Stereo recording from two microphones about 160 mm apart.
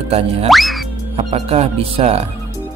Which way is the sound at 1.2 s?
40° right (ahead or behind).